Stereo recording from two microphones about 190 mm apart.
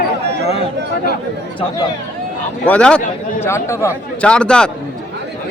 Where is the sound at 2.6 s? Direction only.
5° left (ahead or behind).